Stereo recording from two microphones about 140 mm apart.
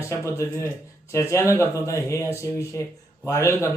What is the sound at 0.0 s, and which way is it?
Speech, 20° left (ahead or behind).